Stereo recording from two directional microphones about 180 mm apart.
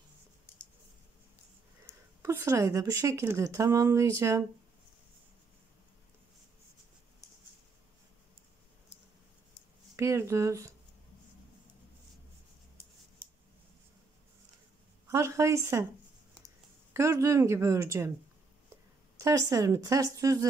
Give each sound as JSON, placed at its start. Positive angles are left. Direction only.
{"t": 2.2, "sound": "a woman's voice", "side_deg": -15}
{"t": 9.9, "sound": "a woman's voice", "side_deg": -15}
{"t": 15.0, "sound": "a woman's voice", "side_deg": -15}
{"t": 16.9, "sound": "a woman's voice", "side_deg": -15}
{"t": 19.1, "sound": "a woman's voice", "side_deg": -15}